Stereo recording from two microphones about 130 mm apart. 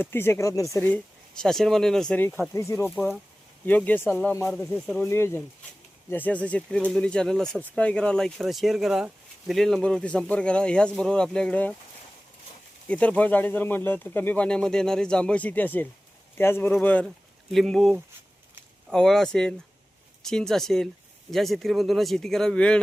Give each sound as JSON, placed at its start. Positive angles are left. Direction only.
{"t": 0.0, "sound": "speech", "side_deg": 20}
{"t": 2.5, "sound": "speech", "side_deg": 20}
{"t": 12.9, "sound": "speech", "side_deg": 10}